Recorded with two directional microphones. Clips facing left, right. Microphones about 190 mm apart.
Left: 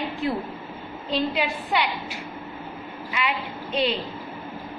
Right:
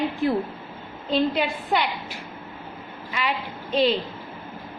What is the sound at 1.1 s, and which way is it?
Speech, 45° right (ahead or behind).